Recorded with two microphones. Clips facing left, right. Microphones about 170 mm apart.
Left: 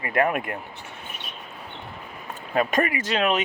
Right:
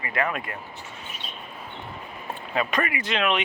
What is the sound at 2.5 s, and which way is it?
Speech, 45° left (ahead or behind).